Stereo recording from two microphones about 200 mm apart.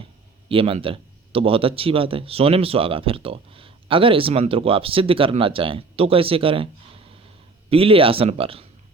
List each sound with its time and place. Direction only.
0.4 s a man's voice: 25° right (ahead or behind)
7.7 s a man's voice: 30° right (ahead or behind)